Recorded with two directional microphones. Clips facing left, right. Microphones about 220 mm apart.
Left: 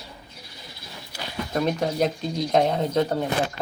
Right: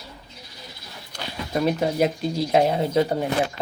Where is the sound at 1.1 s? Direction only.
5° left (ahead or behind).